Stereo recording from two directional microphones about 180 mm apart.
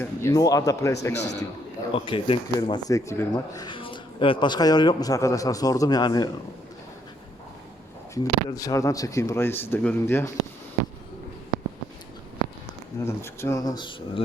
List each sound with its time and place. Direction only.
0.0 s speech: 15° left (ahead or behind)
1.1 s a man's voice: 70° left (ahead or behind)
1.9 s speech: 30° left (ahead or behind)
8.1 s speech: 20° left (ahead or behind)
13.1 s speech: 15° left (ahead or behind)